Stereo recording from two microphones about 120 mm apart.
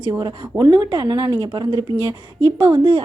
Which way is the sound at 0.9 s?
30° right (ahead or behind).